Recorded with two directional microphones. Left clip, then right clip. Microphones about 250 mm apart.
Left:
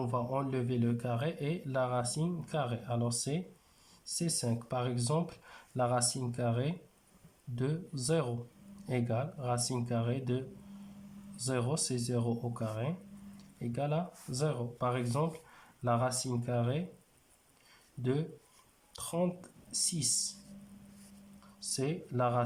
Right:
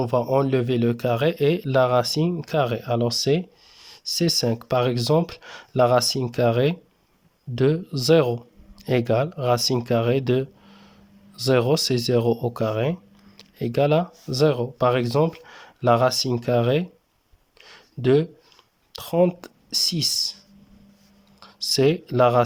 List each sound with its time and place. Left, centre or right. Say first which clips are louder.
0.0 s speech: right 14 dB; right
17.7 s a sound: right 16 dB; right
18.9 s speech: right 15 dB; right
21.4 s speech: right 18 dB; right